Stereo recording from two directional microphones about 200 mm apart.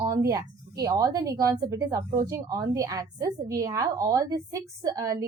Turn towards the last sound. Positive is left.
turn(degrees=-20)  # may be behind; listen again after turning